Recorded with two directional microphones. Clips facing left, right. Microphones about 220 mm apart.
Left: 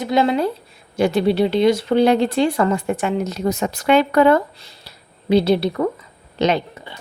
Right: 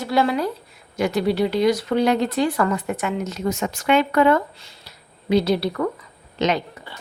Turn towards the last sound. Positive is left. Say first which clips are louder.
# left 3 dB
turn(degrees=30)  # may be behind; listen again after turning